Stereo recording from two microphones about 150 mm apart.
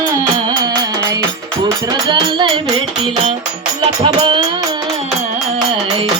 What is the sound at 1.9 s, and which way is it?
Music, 30° right (ahead or behind).